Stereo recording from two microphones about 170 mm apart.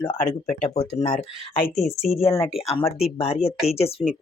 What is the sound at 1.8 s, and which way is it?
Speech, centre (ahead or behind).